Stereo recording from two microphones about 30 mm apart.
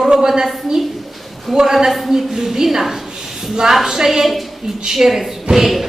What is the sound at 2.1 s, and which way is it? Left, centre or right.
A woman's voice, centre.